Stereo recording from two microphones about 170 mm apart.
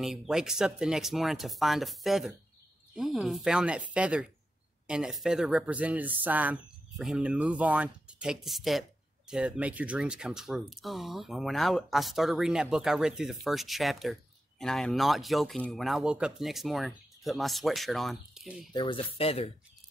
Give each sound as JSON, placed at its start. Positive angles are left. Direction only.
{"t": 0.0, "sound": "speech", "side_deg": -5}
{"t": 18.7, "sound": "speech", "side_deg": 30}